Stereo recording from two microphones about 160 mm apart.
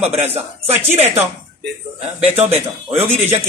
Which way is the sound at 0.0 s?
40° right (ahead or behind).